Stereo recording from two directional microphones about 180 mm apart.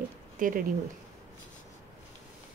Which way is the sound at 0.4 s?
50° right (ahead or behind).